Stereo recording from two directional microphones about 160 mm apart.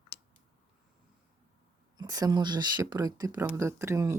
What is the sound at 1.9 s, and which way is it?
Speech, 25° right (ahead or behind).